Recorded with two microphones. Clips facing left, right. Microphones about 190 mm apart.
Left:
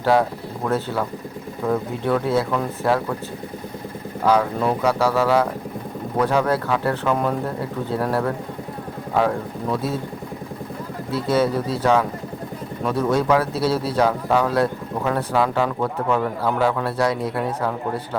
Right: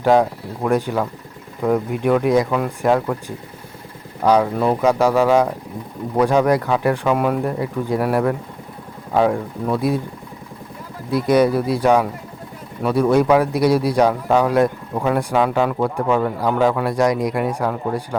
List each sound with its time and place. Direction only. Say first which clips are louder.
0.0 s speech: right 3 dB; 15° right (ahead or behind)
4.2 s speech: right 3 dB; 15° right (ahead or behind)
11.1 s speech: right 5 dB; 15° right (ahead or behind)